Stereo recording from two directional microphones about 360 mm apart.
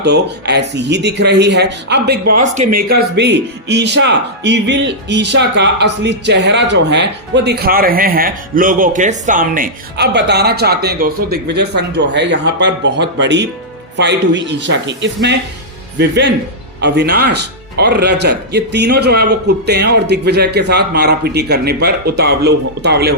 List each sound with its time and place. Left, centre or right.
0.0 s speech: right